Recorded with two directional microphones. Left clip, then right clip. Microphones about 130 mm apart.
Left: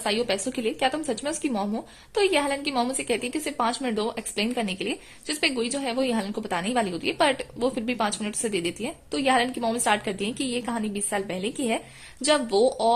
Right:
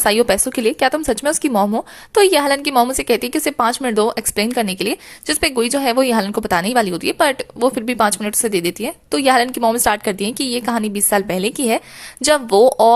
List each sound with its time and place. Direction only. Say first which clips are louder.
0.0 s a woman's voice: right 11 dB; 45° right (ahead or behind)